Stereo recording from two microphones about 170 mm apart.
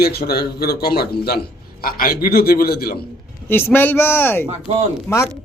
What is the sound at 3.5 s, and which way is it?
Speech, 15° left (ahead or behind).